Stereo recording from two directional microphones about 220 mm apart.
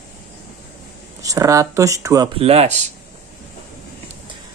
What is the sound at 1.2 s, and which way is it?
Speech, 15° right (ahead or behind).